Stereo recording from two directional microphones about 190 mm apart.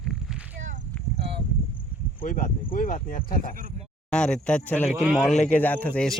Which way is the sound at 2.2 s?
45° left (ahead or behind).